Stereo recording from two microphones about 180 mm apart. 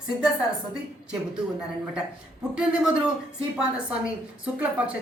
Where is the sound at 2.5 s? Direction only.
5° right (ahead or behind).